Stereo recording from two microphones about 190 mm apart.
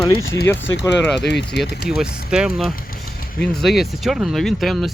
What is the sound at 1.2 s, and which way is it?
Speech, 65° left (ahead or behind).